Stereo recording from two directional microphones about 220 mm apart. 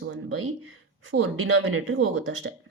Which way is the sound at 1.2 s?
70° right (ahead or behind).